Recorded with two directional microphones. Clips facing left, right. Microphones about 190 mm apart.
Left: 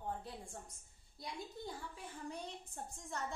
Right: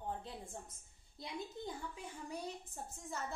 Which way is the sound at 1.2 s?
20° right (ahead or behind).